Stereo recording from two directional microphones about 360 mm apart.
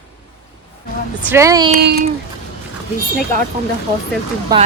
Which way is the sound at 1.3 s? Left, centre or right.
Centre.